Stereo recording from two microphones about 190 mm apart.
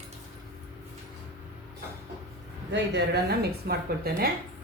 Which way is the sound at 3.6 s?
55° right (ahead or behind).